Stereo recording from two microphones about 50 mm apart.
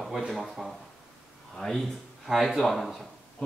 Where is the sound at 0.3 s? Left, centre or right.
Centre.